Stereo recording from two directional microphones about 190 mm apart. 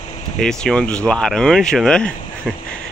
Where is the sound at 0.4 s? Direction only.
5° left (ahead or behind).